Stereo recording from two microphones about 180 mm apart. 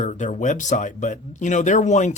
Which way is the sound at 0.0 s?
40° left (ahead or behind).